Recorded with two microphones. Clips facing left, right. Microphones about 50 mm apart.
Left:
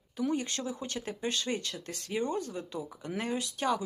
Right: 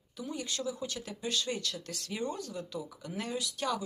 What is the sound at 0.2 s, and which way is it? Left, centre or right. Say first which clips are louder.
Speech: left 6 dB; left.